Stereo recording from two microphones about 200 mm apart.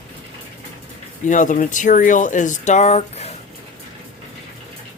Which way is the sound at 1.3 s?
40° left (ahead or behind).